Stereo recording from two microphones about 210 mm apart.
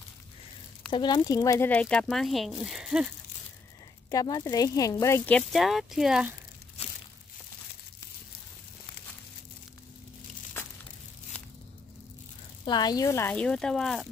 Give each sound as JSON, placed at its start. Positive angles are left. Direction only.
{"t": 0.9, "sound": "speech", "side_deg": 20}
{"t": 1.7, "sound": "speech", "side_deg": 5}
{"t": 4.1, "sound": "speech", "side_deg": 20}
{"t": 5.5, "sound": "speech", "side_deg": 0}
{"t": 6.8, "sound": "a sound", "side_deg": 30}
{"t": 12.6, "sound": "speech", "side_deg": 20}